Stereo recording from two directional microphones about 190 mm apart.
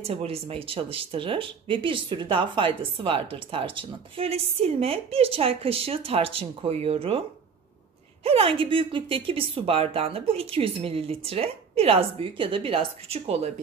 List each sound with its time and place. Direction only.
0.0 s speech: 30° right (ahead or behind)